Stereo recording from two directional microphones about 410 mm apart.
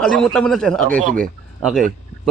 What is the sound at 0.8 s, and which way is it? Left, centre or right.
Speech, centre.